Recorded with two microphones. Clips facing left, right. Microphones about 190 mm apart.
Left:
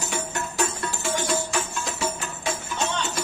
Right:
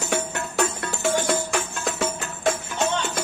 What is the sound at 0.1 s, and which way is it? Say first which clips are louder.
Music: right 7 dB; 60° right (ahead or behind).